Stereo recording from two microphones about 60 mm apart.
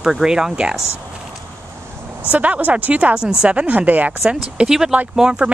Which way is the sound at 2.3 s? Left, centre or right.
Right.